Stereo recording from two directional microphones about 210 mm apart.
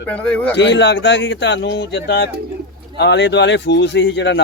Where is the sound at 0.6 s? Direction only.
55° left (ahead or behind).